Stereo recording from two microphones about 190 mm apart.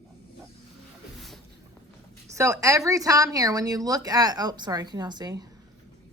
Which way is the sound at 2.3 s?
15° right (ahead or behind).